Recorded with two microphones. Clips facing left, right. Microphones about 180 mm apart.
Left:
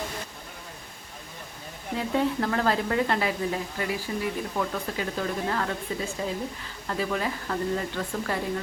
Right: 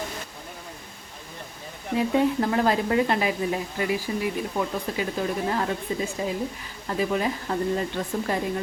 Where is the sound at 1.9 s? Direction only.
15° right (ahead or behind).